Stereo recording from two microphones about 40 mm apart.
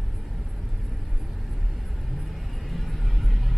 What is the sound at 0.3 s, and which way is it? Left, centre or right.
Vehicle, centre.